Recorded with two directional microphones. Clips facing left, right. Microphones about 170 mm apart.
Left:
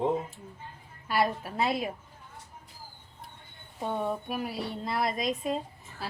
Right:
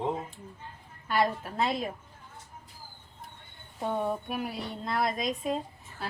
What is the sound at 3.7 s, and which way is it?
A woman's voice, centre (ahead or behind).